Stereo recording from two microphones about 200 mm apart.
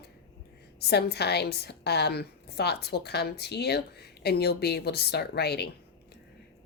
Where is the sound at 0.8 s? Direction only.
55° left (ahead or behind).